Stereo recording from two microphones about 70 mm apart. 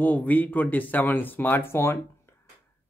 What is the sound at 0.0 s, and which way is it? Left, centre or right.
Speech, left.